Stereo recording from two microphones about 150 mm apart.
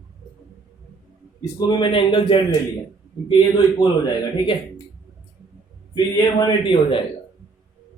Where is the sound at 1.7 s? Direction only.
35° left (ahead or behind).